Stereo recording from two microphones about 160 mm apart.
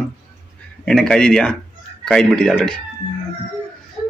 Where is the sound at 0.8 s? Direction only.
5° left (ahead or behind).